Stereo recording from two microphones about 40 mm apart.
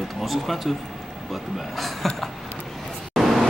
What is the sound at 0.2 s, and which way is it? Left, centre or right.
Speech, centre.